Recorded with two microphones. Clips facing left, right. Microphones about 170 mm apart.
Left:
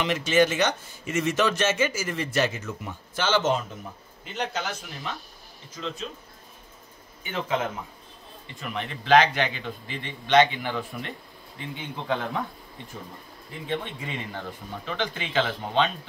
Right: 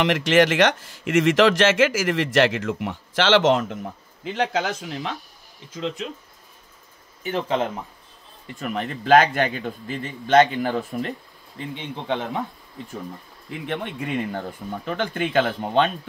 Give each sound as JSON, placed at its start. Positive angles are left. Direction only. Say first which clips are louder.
{"t": 0.0, "sound": "speech", "louder": "right 4 dB", "side_deg": -75}
{"t": 7.2, "sound": "speech", "louder": "right 4 dB", "side_deg": -35}
{"t": 8.5, "sound": "a man's voice", "louder": "right 6 dB", "side_deg": -45}
{"t": 13.5, "sound": "a man's voice", "louder": "right 2 dB", "side_deg": -60}